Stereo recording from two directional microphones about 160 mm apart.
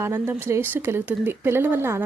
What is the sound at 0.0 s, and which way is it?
A child's voice, 15° right (ahead or behind).